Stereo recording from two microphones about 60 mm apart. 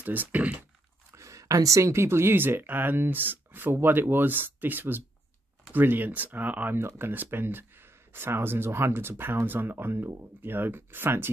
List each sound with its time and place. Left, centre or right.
0.0 s speech: right
1.1 s speech: right